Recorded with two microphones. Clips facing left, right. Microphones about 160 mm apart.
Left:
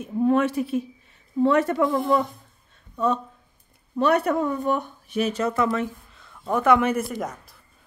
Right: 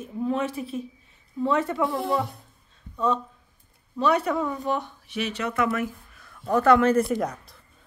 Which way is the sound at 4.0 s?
60° left (ahead or behind).